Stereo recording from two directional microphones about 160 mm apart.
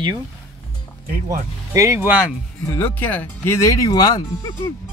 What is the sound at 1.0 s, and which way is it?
Speech, 65° right (ahead or behind).